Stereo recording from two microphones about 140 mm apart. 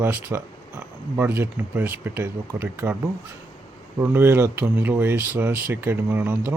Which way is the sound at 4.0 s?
15° right (ahead or behind).